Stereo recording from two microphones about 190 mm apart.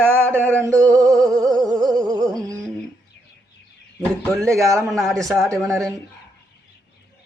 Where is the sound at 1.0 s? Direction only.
Centre (ahead or behind).